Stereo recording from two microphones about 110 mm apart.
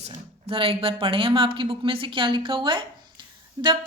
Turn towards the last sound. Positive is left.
turn(degrees=-40)  # may be behind; listen again after turning